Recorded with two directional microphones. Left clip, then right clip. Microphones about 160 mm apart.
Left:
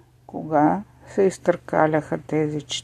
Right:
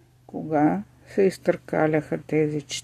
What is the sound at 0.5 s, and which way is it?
Speech, 15° right (ahead or behind).